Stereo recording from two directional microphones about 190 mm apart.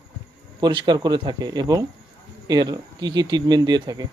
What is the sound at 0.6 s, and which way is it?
Speech, 25° right (ahead or behind).